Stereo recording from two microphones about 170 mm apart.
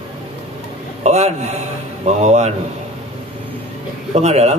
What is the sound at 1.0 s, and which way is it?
A man's voice, 40° right (ahead or behind).